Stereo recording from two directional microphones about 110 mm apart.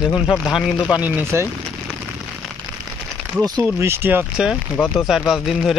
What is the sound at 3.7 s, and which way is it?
Speech, 25° right (ahead or behind).